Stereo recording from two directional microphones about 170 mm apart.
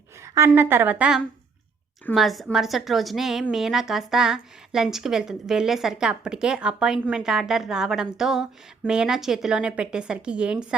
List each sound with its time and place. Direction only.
0.2 s a woman's voice: 15° right (ahead or behind)